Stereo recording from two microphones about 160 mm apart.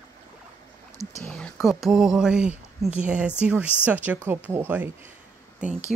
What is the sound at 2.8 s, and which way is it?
Speech, 5° right (ahead or behind).